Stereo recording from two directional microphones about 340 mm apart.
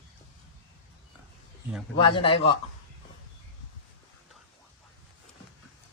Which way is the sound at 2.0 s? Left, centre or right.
Centre.